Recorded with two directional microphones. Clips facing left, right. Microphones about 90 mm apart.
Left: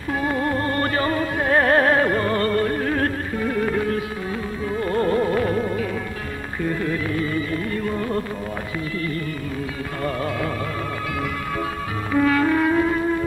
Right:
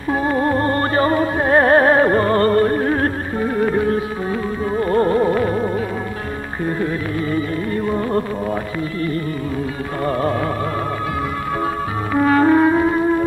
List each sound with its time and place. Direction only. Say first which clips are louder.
0.1 s music: right 5 dB; 30° right (ahead or behind)
10.0 s music: right 6 dB; 35° right (ahead or behind)
12.1 s music: right 5 dB; 35° right (ahead or behind)